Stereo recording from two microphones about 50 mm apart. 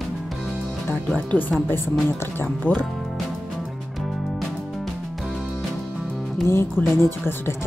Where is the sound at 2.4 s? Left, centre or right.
Left.